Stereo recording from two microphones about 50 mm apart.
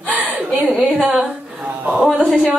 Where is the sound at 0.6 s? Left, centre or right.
Centre.